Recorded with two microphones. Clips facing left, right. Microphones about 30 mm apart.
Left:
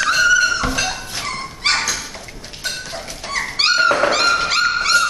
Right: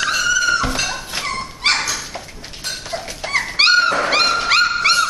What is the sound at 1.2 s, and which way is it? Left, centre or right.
Dog, centre.